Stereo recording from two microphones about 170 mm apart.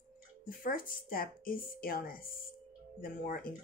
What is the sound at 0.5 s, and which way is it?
Speech, 55° left (ahead or behind).